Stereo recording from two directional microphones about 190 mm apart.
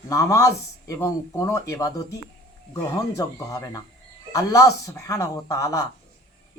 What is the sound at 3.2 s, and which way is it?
Speech, 20° left (ahead or behind).